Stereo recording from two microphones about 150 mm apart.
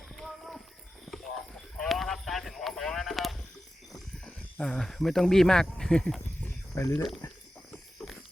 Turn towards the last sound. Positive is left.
turn(degrees=20)  # may be behind; listen again after turning